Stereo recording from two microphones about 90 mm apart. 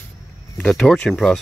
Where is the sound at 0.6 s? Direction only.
5° left (ahead or behind).